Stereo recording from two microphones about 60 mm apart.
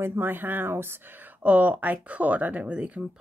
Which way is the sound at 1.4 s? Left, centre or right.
Right.